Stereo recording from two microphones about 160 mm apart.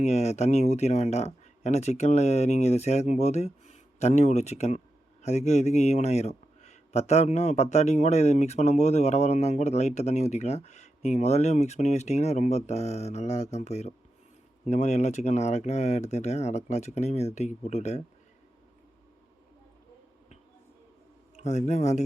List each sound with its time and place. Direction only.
0.0 s speech: 45° left (ahead or behind)
21.3 s speech: 45° left (ahead or behind)